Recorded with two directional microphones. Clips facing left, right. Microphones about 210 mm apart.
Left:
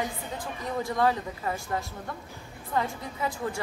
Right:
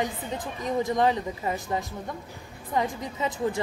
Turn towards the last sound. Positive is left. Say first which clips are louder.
# right 4 dB
turn(degrees=-20)  # may be behind; listen again after turning